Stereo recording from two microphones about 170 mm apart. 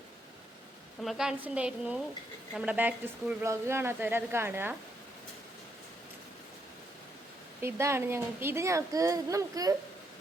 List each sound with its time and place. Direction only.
1.0 s a woman's voice: 5° right (ahead or behind)
7.6 s a woman's voice: 15° right (ahead or behind)